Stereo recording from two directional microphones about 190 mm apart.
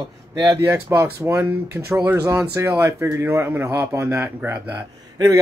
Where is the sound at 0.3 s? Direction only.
20° right (ahead or behind).